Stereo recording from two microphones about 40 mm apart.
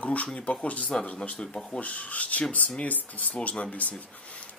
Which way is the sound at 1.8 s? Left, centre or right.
Left.